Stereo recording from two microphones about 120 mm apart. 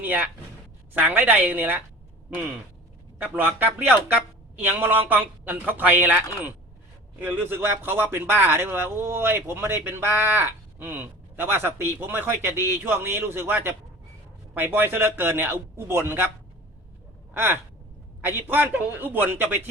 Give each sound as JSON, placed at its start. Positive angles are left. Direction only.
{"t": 0.0, "sound": "a man's voice", "side_deg": -15}
{"t": 3.2, "sound": "a man's voice", "side_deg": -15}
{"t": 17.3, "sound": "a man's voice", "side_deg": -20}